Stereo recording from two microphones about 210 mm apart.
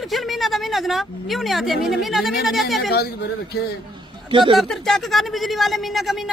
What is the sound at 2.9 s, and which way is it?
Speech, 50° left (ahead or behind).